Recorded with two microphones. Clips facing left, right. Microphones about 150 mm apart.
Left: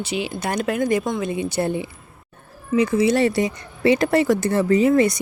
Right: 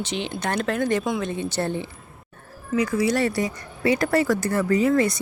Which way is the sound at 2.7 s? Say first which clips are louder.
Left 4 dB; 25° left (ahead or behind).